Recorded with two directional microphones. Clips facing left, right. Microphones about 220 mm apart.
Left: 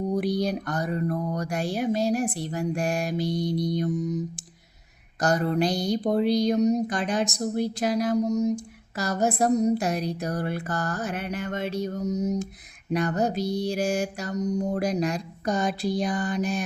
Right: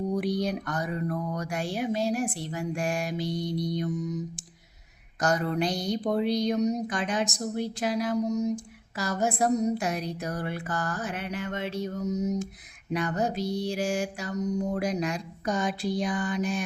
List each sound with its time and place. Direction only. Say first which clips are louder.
0.1 s speech: left 4 dB; 35° left (ahead or behind)
5.2 s speech: left 3 dB; 35° left (ahead or behind)